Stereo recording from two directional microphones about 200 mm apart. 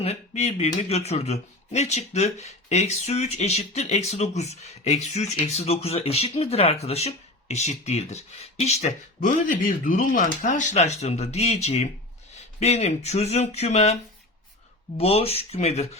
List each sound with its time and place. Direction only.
0.0 s speech: 30° left (ahead or behind)